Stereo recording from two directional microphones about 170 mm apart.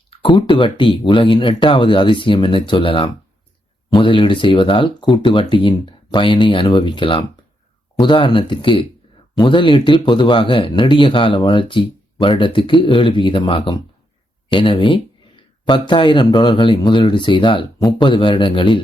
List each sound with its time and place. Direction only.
0.1 s speech: 30° left (ahead or behind)